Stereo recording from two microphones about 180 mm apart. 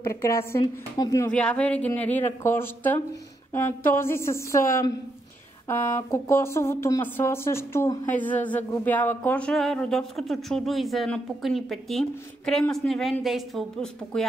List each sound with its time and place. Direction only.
0.0 s speech: 15° left (ahead or behind)
1.3 s speech: 5° left (ahead or behind)